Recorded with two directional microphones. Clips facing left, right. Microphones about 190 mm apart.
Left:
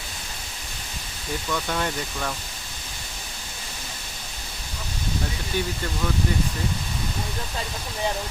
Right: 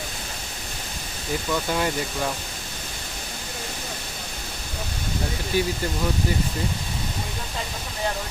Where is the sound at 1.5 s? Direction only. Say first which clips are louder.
Right 2 dB; 10° right (ahead or behind).